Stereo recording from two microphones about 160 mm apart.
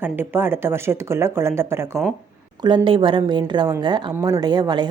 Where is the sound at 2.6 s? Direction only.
30° right (ahead or behind).